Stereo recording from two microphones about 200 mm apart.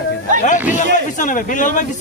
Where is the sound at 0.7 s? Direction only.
40° left (ahead or behind).